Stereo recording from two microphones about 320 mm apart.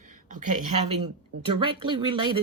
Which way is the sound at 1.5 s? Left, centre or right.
Centre.